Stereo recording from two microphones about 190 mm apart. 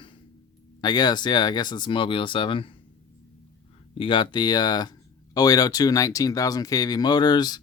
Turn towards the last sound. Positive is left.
turn(degrees=20)  # may be behind; listen again after turning